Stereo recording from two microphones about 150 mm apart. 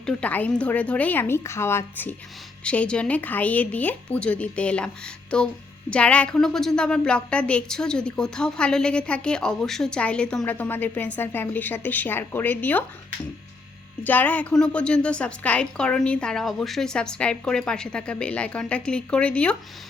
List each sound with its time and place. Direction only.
0.0 s a woman's voice: 10° left (ahead or behind)
14.0 s a woman's voice: 10° left (ahead or behind)